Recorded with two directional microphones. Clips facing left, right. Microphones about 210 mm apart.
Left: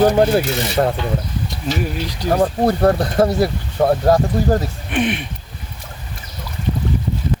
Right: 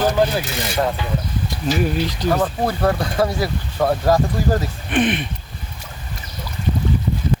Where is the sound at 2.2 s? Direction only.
40° left (ahead or behind).